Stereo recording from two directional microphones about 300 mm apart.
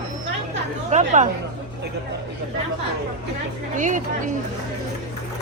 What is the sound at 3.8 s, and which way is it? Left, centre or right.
Speech, right.